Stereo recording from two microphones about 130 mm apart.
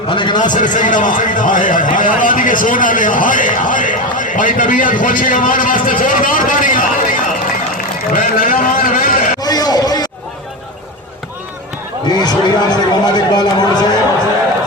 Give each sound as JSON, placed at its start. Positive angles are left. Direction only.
{"t": 0.1, "sound": "a man's voice", "side_deg": 40}
{"t": 0.4, "sound": "a man's voice", "side_deg": 80}
{"t": 9.4, "sound": "a sound", "side_deg": 30}
{"t": 12.0, "sound": "a man's voice", "side_deg": 30}